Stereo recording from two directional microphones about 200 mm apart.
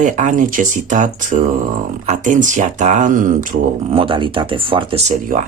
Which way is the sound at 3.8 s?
25° right (ahead or behind).